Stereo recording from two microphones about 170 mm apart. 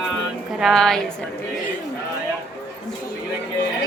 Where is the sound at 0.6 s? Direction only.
Centre (ahead or behind).